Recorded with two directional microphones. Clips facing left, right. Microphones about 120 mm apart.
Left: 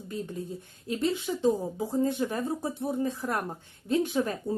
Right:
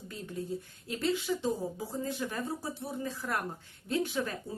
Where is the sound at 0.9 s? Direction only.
25° left (ahead or behind).